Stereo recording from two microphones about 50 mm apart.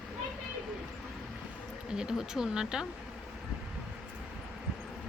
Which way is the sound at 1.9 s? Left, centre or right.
Centre.